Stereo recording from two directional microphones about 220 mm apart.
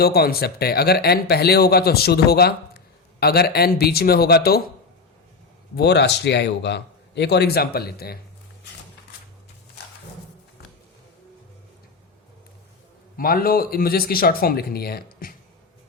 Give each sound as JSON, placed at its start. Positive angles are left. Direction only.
{"t": 0.0, "sound": "a man's voice", "side_deg": 45}
{"t": 5.7, "sound": "a man's voice", "side_deg": 50}
{"t": 13.1, "sound": "a man's voice", "side_deg": 40}